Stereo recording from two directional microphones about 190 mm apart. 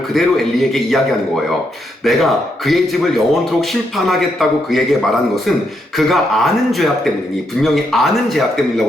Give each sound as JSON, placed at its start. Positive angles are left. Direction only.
{"t": 0.1, "sound": "speech", "side_deg": 0}
{"t": 2.0, "sound": "speech", "side_deg": 0}